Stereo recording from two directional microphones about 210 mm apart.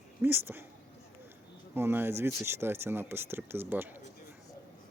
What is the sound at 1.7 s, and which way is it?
Speech, 10° right (ahead or behind).